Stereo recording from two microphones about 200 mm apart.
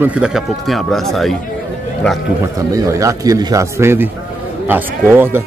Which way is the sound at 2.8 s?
15° right (ahead or behind).